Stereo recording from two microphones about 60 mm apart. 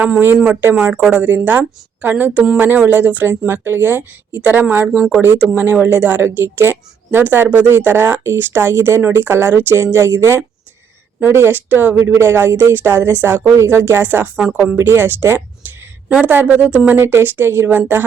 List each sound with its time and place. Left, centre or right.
0.4 s a woman's voice: right
3.4 s a woman's voice: right
8.2 s speech: right
14.3 s a woman's voice: centre
14.8 s speech: right
15.6 s a sound: right
16.0 s a woman's voice: right
17.0 s speech: right